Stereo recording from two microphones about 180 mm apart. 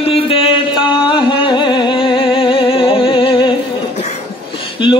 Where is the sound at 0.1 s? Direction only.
30° left (ahead or behind).